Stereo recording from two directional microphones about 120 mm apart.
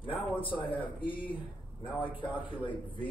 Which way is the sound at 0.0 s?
45° left (ahead or behind).